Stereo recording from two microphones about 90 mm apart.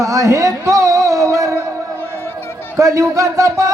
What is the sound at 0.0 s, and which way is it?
Music, 35° right (ahead or behind).